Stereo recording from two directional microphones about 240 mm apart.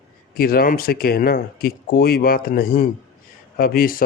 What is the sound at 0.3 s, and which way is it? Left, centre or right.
Speech, left.